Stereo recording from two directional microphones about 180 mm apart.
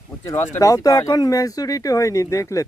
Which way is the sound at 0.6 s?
20° left (ahead or behind).